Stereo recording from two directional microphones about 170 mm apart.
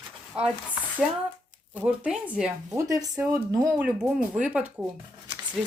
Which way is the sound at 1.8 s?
10° right (ahead or behind).